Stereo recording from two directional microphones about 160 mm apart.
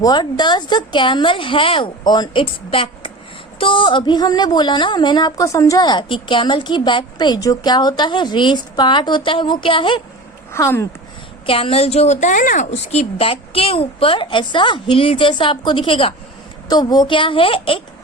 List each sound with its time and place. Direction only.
0.0 s a woman's voice: 25° left (ahead or behind)
10.5 s speech: 15° left (ahead or behind)
11.4 s a woman's voice: 35° left (ahead or behind)